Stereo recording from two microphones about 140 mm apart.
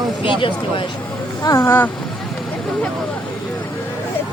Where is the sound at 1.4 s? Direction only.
20° left (ahead or behind).